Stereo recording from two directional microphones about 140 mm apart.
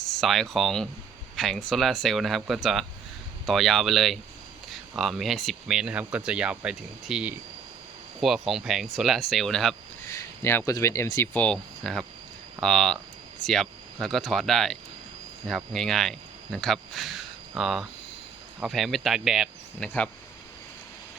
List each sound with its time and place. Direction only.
0.2 s speech: centre (ahead or behind)
10.1 s a sound: 20° left (ahead or behind)
10.7 s speech: 20° left (ahead or behind)
11.4 s speech: 5° left (ahead or behind)
19.8 s speech: 10° left (ahead or behind)